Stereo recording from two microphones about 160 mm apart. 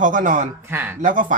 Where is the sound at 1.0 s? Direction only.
55° right (ahead or behind).